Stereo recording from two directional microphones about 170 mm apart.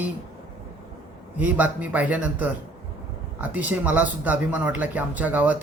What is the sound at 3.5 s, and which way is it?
Speech, 10° right (ahead or behind).